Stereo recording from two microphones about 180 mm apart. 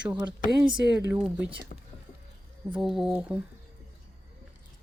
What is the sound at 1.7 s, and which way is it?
Whispering, 45° left (ahead or behind).